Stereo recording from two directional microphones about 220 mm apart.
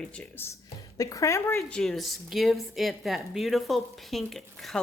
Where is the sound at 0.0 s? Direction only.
5° left (ahead or behind).